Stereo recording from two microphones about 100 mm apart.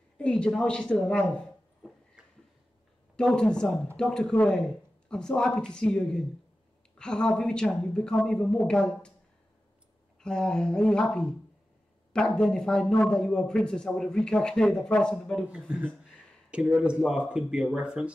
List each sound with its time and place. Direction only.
0.2 s speech: 10° left (ahead or behind)
3.2 s speech: 10° left (ahead or behind)
10.2 s speech: 5° left (ahead or behind)
15.7 s speech: 10° right (ahead or behind)